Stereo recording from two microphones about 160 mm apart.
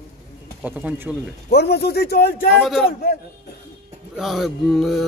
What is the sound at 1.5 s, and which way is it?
Speech, 85° left.